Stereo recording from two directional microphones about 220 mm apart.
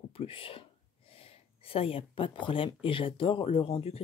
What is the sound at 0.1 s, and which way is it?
Speech, 25° left (ahead or behind).